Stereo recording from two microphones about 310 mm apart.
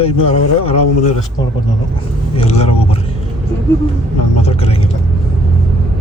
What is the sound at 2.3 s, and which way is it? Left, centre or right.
Speech, centre.